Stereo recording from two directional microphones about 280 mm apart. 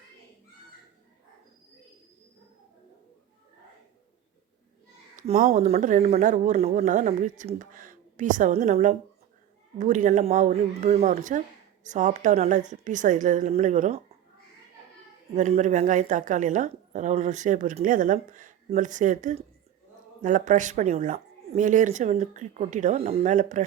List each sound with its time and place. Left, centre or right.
5.1 s speech: right
15.4 s speech: right